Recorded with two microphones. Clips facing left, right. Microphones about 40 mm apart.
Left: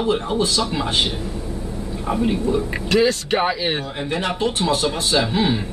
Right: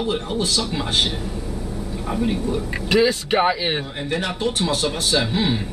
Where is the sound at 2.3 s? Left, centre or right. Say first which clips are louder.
Left 3 dB; left.